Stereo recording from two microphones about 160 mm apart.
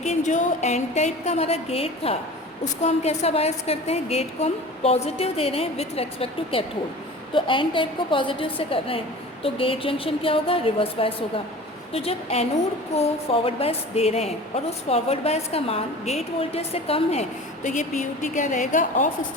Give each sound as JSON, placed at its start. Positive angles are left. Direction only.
{"t": 0.0, "sound": "a woman's voice", "side_deg": 45}